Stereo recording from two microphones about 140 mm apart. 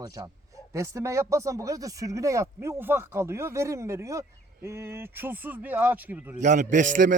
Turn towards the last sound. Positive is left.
turn(degrees=-70)  # may be behind; listen again after turning